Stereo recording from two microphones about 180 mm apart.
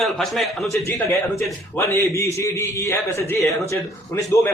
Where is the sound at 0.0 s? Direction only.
Centre (ahead or behind).